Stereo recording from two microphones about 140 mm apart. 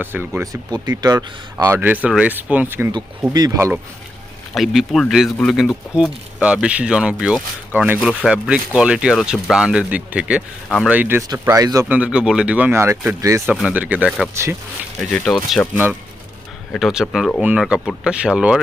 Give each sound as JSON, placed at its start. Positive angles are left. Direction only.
{"t": 0.0, "sound": "speech", "side_deg": -15}
{"t": 1.6, "sound": "speech", "side_deg": -15}
{"t": 2.9, "sound": "speech", "side_deg": -30}
{"t": 4.5, "sound": "speech", "side_deg": 0}
{"t": 11.2, "sound": "speech", "side_deg": -20}
{"t": 11.9, "sound": "speech", "side_deg": -10}
{"t": 13.5, "sound": "speech", "side_deg": -5}
{"t": 15.1, "sound": "speech", "side_deg": 5}
{"t": 15.7, "sound": "speech", "side_deg": -15}